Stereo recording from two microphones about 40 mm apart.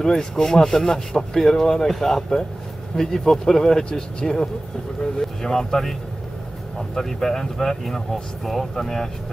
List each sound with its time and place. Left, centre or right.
0.0 s speech: centre
5.4 s speech: centre
7.0 s speech: centre